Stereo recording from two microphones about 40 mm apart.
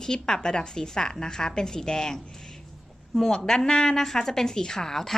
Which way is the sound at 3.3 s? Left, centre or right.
Centre.